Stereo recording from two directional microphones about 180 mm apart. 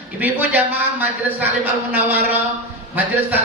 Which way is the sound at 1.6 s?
10° right (ahead or behind).